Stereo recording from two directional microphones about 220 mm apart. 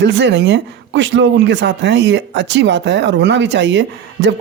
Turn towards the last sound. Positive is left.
turn(degrees=-55)  # may be behind; listen again after turning